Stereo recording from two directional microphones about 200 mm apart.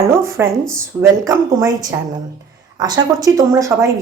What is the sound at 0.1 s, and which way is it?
A woman's voice, 15° right (ahead or behind).